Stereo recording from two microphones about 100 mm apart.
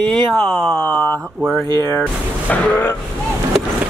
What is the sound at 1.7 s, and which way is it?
Speech, 45° right (ahead or behind).